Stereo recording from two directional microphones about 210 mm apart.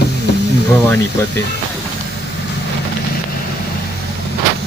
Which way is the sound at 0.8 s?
10° left (ahead or behind).